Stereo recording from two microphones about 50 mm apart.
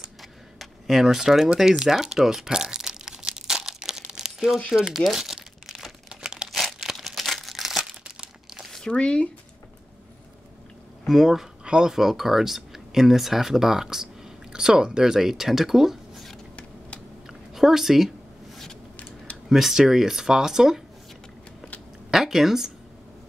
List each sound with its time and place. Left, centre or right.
0.2 s a sound: centre
1.6 s crumpling: centre
6.0 s crumpling: centre
6.6 s crumpling: centre
8.7 s speech: centre
11.1 s speech: centre
17.3 s a sound: centre
19.5 s speech: centre
22.1 s a woman's voice: centre